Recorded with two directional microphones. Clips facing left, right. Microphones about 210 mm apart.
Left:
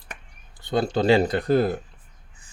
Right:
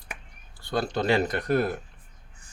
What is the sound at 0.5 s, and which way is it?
Speech, 20° left (ahead or behind).